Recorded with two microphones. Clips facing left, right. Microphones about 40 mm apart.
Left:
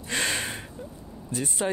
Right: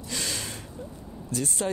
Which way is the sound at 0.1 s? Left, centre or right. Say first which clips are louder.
Left 6 dB; left.